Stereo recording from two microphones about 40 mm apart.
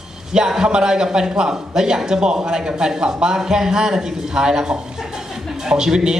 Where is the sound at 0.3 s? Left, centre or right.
Centre.